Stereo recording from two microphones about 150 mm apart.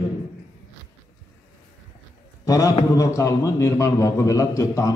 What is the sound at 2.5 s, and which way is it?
A man's voice, 20° left (ahead or behind).